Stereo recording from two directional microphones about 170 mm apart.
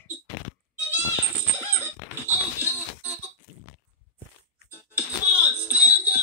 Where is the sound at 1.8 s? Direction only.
10° right (ahead or behind).